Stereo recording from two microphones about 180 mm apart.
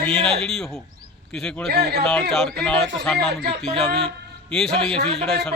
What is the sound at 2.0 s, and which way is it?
Speech, 5° left (ahead or behind).